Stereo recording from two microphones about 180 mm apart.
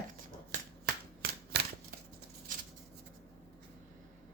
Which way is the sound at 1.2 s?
55° right (ahead or behind).